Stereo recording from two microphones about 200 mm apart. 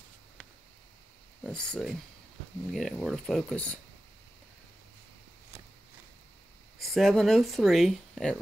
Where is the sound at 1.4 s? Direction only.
5° left (ahead or behind).